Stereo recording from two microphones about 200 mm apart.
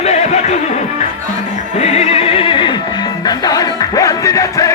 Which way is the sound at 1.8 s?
30° left (ahead or behind).